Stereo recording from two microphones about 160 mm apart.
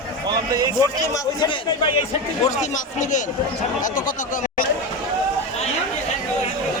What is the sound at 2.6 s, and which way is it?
Speech, 50° left (ahead or behind).